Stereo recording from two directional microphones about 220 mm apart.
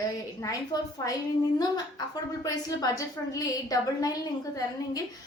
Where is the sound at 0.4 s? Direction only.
15° left (ahead or behind).